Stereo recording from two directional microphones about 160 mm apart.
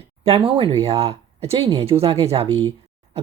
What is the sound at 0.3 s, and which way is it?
Speech, 35° right (ahead or behind).